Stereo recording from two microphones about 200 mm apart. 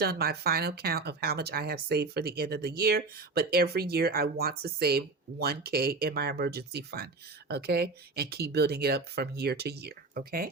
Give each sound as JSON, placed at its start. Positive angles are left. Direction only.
{"t": 0.0, "sound": "speech", "side_deg": -50}